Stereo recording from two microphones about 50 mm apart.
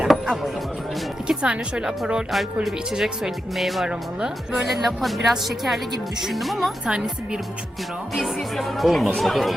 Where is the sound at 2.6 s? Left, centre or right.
Centre.